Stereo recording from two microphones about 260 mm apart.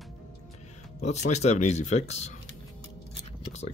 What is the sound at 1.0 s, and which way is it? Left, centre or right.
Speech, left.